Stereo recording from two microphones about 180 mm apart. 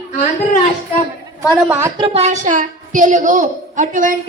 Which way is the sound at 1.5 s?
15° right (ahead or behind).